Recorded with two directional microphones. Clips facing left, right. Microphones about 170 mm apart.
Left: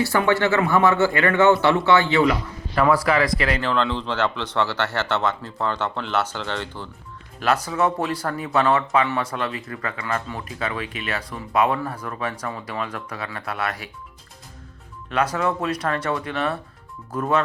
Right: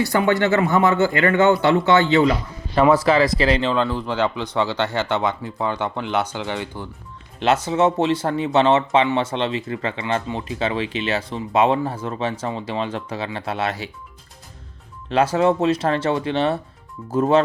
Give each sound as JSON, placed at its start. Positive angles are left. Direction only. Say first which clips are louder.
{"t": 0.0, "sound": "speech", "louder": "right 1 dB", "side_deg": -15}
{"t": 7.3, "sound": "speech", "louder": "right 3 dB", "side_deg": -25}
{"t": 15.1, "sound": "speech", "louder": "right 5 dB", "side_deg": -25}